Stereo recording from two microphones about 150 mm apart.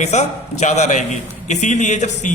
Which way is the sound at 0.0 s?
50° left (ahead or behind).